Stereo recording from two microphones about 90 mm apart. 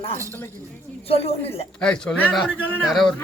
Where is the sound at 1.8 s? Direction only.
10° left (ahead or behind).